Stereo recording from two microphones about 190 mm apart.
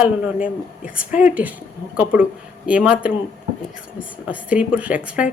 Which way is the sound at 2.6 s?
5° right (ahead or behind).